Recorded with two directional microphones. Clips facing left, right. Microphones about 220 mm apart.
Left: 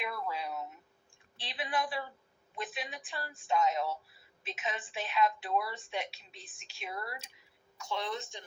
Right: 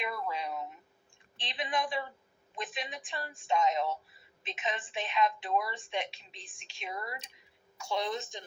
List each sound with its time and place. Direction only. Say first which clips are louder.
0.0 s a sound: right 2 dB; 5° left (ahead or behind)
1.4 s a woman's voice: right 1 dB; 5° left (ahead or behind)
7.8 s a woman's voice: right 3 dB; 15° right (ahead or behind)